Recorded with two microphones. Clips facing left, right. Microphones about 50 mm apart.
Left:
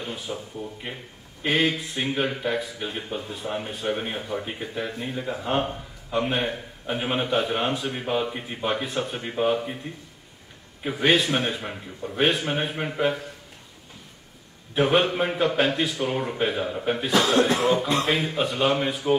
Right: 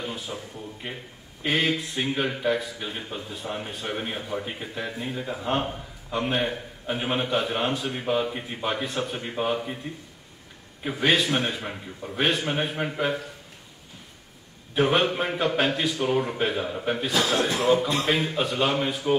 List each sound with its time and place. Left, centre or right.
0.3 s a man's voice: centre
10.8 s a man's voice: centre
14.8 s a man's voice: centre
17.1 s speech: left
18.0 s a man's voice: centre